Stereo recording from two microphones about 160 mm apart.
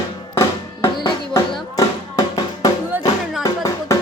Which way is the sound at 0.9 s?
25° left (ahead or behind).